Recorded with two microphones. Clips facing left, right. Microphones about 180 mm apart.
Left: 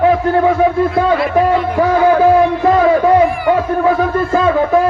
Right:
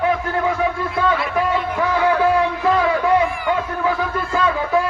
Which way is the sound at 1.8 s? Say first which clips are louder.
Left 7 dB; 35° left (ahead or behind).